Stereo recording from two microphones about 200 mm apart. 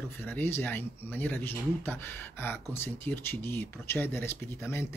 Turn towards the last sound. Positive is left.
turn(degrees=10)  # may be behind; listen again after turning